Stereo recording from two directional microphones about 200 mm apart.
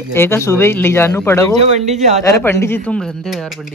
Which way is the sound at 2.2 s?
10° left (ahead or behind).